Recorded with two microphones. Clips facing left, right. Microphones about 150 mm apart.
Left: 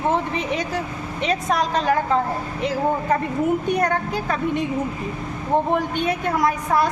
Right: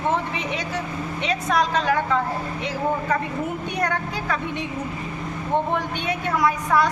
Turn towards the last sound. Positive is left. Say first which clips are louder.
# left 1 dB
turn(degrees=45)  # may be behind; listen again after turning